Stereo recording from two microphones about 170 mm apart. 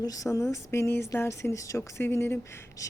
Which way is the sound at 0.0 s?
20° left (ahead or behind).